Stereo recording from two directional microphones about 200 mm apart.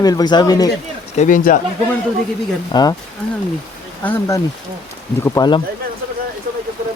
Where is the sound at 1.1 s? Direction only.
40° left (ahead or behind).